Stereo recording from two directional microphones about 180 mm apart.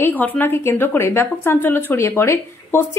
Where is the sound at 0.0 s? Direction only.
10° left (ahead or behind).